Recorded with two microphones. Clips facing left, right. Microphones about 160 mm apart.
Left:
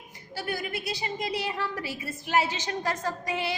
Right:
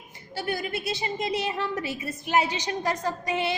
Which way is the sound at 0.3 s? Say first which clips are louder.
Right 3 dB; 25° right (ahead or behind).